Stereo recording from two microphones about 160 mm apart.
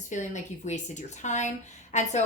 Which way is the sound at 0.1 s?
50° left (ahead or behind).